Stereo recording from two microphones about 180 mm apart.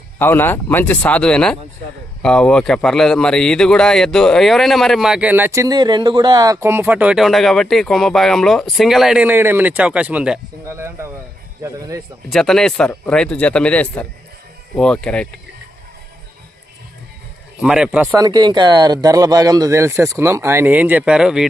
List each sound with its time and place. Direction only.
0.2 s a man's voice: 10° left (ahead or behind); by 12.0 s 15° right (ahead or behind)
12.3 s a man's voice: centre (ahead or behind)
17.6 s a man's voice: 5° right (ahead or behind)
18.2 s speech: 25° right (ahead or behind); by 21.4 s 5° right (ahead or behind)